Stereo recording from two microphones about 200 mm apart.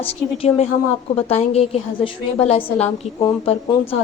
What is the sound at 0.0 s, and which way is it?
A woman's voice, 30° left (ahead or behind).